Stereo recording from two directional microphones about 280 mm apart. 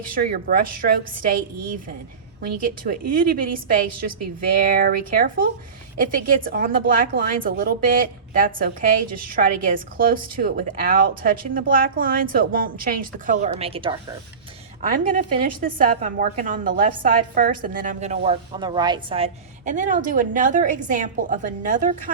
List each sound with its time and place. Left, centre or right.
0.1 s a woman's voice: right
2.4 s a woman's voice: right
4.8 s a woman's voice: right